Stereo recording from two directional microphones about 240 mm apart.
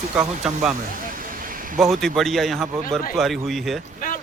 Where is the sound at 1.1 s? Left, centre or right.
Right.